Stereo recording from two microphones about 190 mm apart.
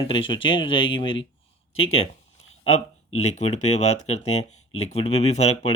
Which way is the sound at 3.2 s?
35° left (ahead or behind).